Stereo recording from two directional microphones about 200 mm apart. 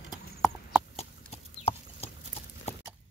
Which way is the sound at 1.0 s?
30° left (ahead or behind).